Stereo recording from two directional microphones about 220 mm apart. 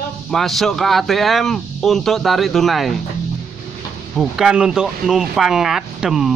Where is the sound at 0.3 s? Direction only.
Centre (ahead or behind).